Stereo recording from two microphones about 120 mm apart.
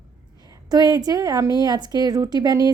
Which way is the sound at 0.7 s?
35° right (ahead or behind).